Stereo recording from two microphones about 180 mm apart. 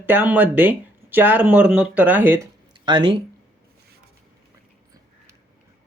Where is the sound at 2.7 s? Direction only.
25° right (ahead or behind).